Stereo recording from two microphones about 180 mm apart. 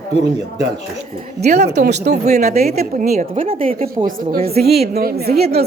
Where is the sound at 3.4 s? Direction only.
50° right (ahead or behind).